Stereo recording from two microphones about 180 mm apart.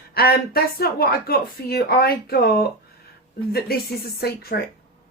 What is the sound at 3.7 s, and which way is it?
Speech, 60° left (ahead or behind).